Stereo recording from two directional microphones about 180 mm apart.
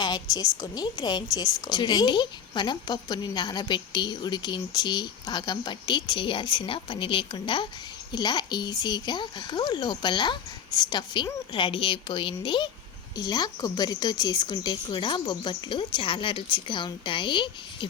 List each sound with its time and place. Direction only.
0.0 s a woman's voice: 20° left (ahead or behind)